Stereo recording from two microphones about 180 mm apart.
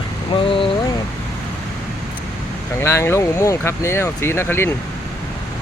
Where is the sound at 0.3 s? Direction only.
30° left (ahead or behind).